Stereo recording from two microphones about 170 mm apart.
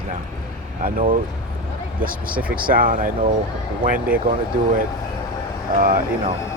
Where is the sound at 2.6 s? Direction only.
55° right (ahead or behind).